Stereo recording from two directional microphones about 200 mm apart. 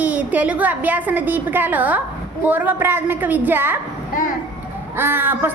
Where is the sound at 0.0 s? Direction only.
10° right (ahead or behind).